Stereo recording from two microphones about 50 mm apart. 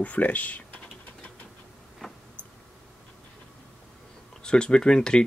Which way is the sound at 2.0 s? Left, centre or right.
Centre.